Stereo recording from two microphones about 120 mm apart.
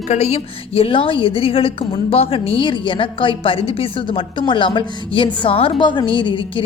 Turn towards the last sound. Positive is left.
turn(degrees=45)  # may be behind; listen again after turning